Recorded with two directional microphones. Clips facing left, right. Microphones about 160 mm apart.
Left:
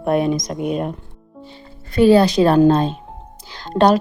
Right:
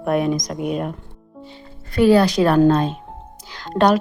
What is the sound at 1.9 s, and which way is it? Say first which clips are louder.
A woman's voice: left 2 dB; 25° left (ahead or behind).